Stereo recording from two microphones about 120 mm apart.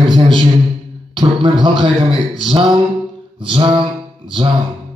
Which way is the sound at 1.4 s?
40° right (ahead or behind).